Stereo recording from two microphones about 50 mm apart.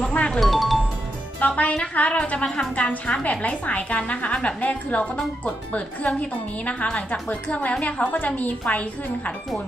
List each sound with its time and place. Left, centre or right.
0.3 s music: centre
1.4 s a woman's voice: left
2.9 s a woman's voice: left